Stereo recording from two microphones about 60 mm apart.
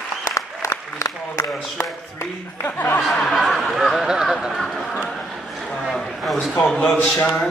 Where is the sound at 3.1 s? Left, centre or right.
Centre.